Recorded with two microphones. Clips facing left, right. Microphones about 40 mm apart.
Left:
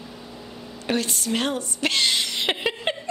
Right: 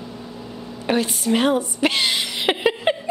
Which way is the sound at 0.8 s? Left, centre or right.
Centre.